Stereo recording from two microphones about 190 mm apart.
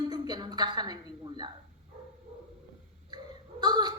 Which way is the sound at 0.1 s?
20° right (ahead or behind).